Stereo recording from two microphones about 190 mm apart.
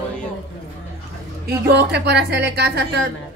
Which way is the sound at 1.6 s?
60° right (ahead or behind).